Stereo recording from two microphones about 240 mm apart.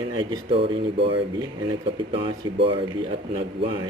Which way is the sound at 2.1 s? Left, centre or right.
Right.